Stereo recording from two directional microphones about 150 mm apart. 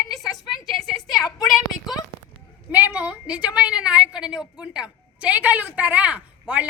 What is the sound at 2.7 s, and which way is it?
A woman's voice, 10° right (ahead or behind).